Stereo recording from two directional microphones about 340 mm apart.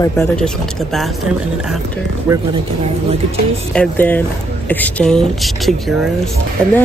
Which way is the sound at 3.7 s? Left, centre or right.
Centre.